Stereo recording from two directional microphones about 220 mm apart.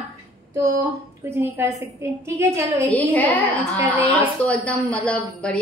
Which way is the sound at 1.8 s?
15° right (ahead or behind).